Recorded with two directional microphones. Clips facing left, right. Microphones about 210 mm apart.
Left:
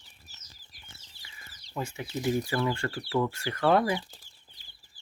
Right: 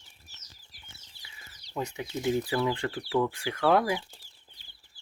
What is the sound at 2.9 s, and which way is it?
Speech, 5° right (ahead or behind).